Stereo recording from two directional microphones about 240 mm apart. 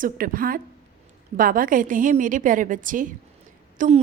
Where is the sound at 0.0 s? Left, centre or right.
Right.